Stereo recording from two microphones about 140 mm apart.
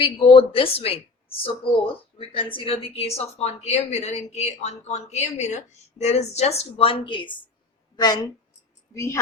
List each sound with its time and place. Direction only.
0.0 s a woman's voice: 40° left (ahead or behind)